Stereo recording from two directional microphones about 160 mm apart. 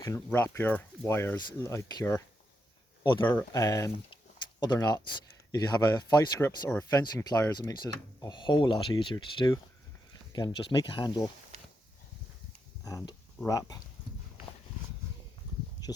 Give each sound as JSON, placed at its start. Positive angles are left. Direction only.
{"t": 0.0, "sound": "speech", "side_deg": 15}
{"t": 12.8, "sound": "speech", "side_deg": 20}